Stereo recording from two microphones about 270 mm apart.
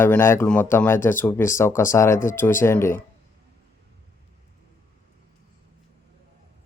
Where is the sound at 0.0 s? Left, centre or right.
Centre.